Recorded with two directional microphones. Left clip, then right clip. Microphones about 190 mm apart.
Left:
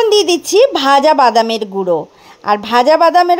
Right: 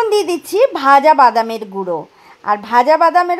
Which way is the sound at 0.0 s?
25° left (ahead or behind).